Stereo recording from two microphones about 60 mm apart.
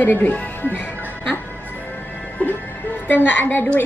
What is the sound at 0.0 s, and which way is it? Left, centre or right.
Speech, left.